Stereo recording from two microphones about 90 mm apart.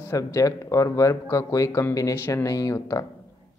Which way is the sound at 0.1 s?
35° left (ahead or behind).